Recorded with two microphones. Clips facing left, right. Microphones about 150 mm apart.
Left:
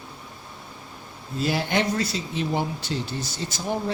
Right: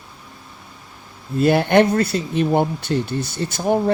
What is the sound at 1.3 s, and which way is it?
Speech, 55° right (ahead or behind).